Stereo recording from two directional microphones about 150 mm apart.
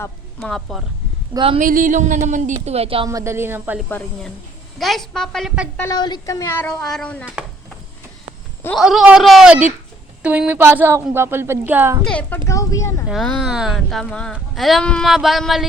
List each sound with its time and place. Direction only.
0.3 s speech: centre (ahead or behind)
1.3 s a woman's voice: 35° right (ahead or behind)
1.5 s a woman's voice: 65° right (ahead or behind); by 3.1 s 40° right (ahead or behind)
3.1 s speech: 20° right (ahead or behind)
3.8 s speech: 10° left (ahead or behind)
4.8 s speech: centre (ahead or behind)
5.9 s speech: 25° left (ahead or behind)
6.8 s speech: 5° left (ahead or behind)
8.7 s speech: centre (ahead or behind)
12.0 s speech: 10° left (ahead or behind)
12.5 s speech: 20° left (ahead or behind)
13.1 s speech: centre (ahead or behind)